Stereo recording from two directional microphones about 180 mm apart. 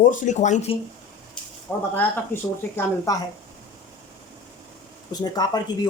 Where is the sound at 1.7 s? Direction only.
15° left (ahead or behind).